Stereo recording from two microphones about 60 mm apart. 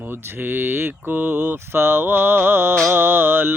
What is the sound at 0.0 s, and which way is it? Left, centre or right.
Mantra, right.